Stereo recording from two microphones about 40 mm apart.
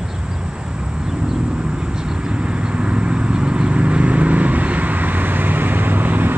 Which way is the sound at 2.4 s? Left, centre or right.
Right.